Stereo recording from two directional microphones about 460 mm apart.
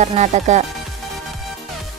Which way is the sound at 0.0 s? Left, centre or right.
Centre.